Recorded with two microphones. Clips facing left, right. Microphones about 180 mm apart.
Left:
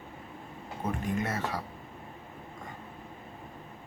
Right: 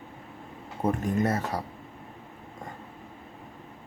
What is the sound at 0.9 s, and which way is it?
Speech, 40° right (ahead or behind).